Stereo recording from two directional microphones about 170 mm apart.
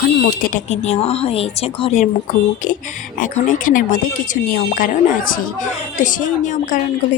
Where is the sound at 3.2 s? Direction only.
50° left (ahead or behind).